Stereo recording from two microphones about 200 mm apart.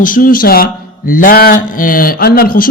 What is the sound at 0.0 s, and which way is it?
Speech, 45° left (ahead or behind).